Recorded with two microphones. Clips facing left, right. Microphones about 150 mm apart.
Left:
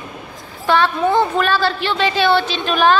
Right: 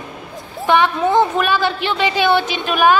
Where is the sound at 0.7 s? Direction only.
15° right (ahead or behind).